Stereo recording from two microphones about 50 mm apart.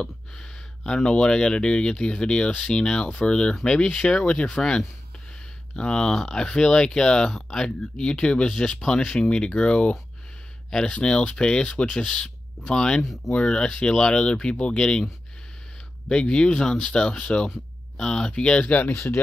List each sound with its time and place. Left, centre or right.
0.4 s speech: centre
6.1 s speech: centre
16.1 s speech: centre